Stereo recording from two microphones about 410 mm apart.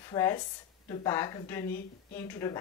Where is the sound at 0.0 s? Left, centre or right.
Centre.